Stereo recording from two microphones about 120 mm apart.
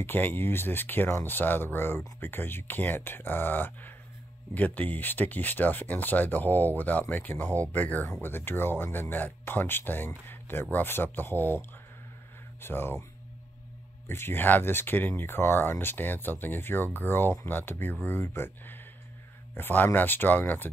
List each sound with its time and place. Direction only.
0.0 s speech: 15° left (ahead or behind)
14.0 s speech: 20° left (ahead or behind)